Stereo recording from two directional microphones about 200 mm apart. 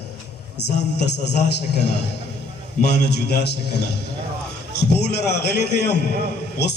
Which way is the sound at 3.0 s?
55° left (ahead or behind).